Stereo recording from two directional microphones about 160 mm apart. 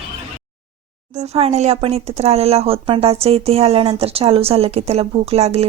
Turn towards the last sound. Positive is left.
turn(degrees=-40)  # may be behind; listen again after turning